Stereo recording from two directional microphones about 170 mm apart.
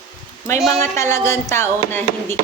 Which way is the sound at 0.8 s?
15° left (ahead or behind).